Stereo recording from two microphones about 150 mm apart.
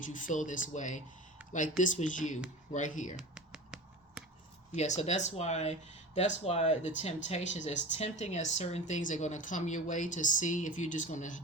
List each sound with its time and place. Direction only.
0.1 s speech: 60° left (ahead or behind)
3.2 s a sound: 5° right (ahead or behind)
4.7 s speech: 50° left (ahead or behind)